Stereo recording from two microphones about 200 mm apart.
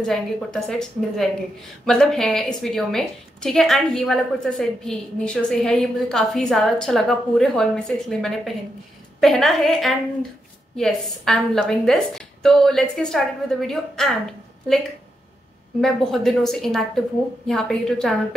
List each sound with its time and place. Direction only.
0.0 s a woman's voice: 5° left (ahead or behind)
15.8 s a woman's voice: centre (ahead or behind)